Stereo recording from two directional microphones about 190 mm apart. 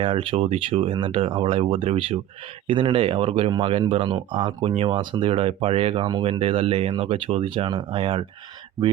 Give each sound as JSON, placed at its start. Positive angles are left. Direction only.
{"t": 0.0, "sound": "speech", "side_deg": -30}